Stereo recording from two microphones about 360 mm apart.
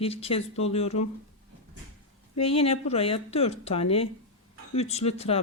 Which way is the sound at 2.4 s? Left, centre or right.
Centre.